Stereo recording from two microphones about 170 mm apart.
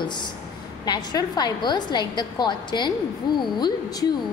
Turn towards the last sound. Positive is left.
turn(degrees=25)  # may be behind; listen again after turning